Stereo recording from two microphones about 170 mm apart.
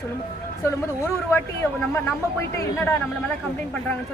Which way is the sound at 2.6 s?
15° left (ahead or behind).